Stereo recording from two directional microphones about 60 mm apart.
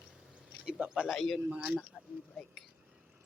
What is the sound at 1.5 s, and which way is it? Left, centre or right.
Speech, right.